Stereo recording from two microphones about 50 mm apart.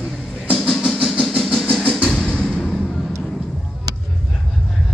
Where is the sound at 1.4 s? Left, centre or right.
Centre.